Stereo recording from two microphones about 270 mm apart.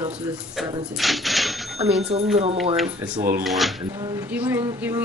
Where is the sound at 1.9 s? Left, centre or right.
Right.